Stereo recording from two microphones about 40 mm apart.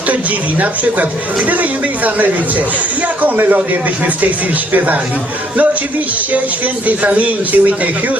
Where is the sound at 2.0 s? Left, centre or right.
Right.